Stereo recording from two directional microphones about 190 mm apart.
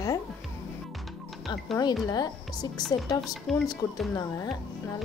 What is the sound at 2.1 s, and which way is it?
Speech, 20° left (ahead or behind).